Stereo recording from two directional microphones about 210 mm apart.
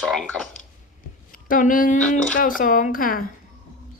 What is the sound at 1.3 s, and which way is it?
A woman's voice, 40° left (ahead or behind).